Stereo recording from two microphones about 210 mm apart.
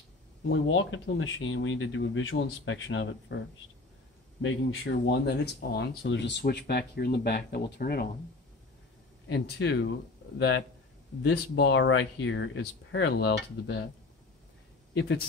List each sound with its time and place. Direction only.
0.5 s speech: 65° left (ahead or behind)
4.4 s speech: 65° left (ahead or behind); by 8.1 s 50° left (ahead or behind)
9.3 s speech: 55° left (ahead or behind)
11.2 s speech: 55° left (ahead or behind)